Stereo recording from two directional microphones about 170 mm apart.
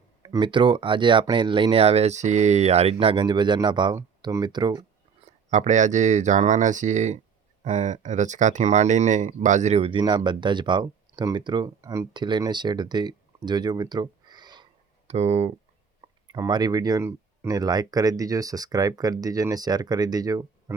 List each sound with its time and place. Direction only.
0.2 s speech: 25° right (ahead or behind)
5.2 s speech: 45° right (ahead or behind); by 14.7 s 25° right (ahead or behind)
15.0 s speech: 40° right (ahead or behind)
16.3 s speech: 25° right (ahead or behind)